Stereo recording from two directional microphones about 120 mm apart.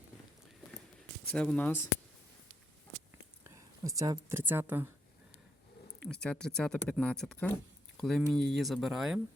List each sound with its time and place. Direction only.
1.3 s speech: 5° left (ahead or behind)
3.4 s speech: 25° right (ahead or behind)
6.1 s speech: 5° left (ahead or behind)